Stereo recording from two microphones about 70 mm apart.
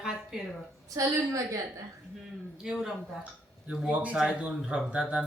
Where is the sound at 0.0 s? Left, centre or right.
Centre.